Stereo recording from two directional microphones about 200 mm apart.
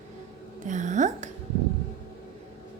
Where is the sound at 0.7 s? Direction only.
40° right (ahead or behind).